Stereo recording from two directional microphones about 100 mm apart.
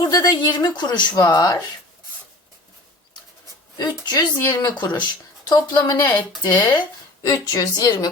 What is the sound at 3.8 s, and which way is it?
A woman's voice, 45° left (ahead or behind).